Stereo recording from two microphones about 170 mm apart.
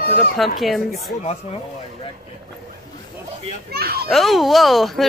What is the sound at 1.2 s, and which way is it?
Speech, 35° left (ahead or behind).